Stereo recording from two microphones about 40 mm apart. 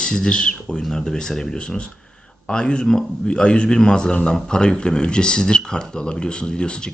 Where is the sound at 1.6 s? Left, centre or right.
Left.